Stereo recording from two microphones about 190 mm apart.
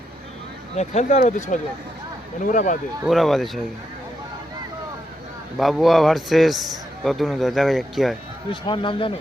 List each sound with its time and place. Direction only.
0.8 s speech: 35° left (ahead or behind)
3.1 s a man's voice: centre (ahead or behind)
5.5 s a man's voice: centre (ahead or behind)
8.6 s speech: 25° left (ahead or behind)